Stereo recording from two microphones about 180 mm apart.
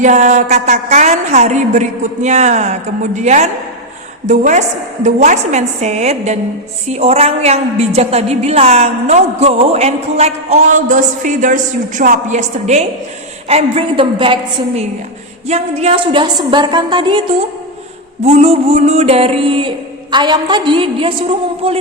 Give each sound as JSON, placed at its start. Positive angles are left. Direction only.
{"t": 0.0, "sound": "a woman's voice", "side_deg": -40}
{"t": 15.4, "sound": "a woman's voice", "side_deg": -35}